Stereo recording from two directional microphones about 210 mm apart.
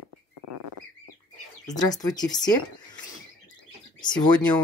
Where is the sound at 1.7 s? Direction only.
20° left (ahead or behind).